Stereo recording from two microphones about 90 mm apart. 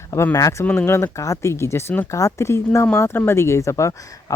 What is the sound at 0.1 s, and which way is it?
Speech, 30° left (ahead or behind).